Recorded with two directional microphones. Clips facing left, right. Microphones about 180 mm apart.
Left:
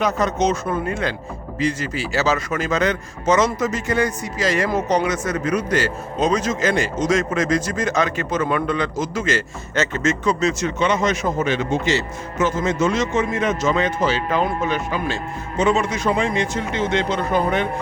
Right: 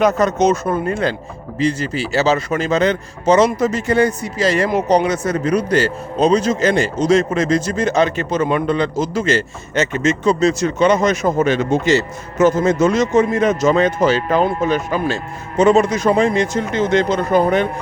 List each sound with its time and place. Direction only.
0.0 s a man's voice: 45° right (ahead or behind)
9.7 s speech: 15° right (ahead or behind)
10.2 s speech: 35° right (ahead or behind)